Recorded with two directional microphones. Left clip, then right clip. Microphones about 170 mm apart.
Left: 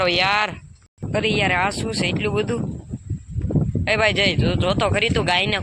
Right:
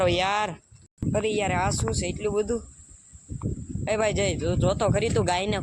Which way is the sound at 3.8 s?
5° right (ahead or behind).